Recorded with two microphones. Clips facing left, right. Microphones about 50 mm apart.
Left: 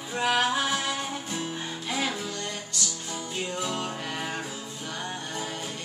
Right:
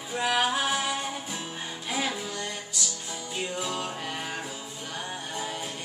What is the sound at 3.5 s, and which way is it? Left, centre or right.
Music, centre.